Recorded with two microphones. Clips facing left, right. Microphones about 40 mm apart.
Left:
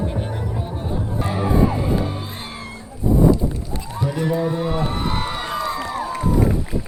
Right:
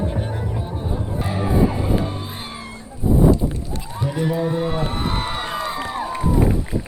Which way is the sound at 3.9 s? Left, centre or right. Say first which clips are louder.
Left 1 dB; centre.